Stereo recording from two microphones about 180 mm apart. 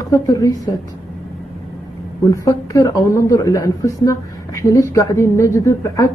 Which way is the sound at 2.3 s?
15° left (ahead or behind).